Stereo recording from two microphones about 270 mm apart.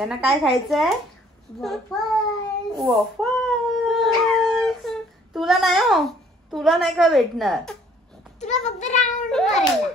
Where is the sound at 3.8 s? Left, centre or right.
Centre.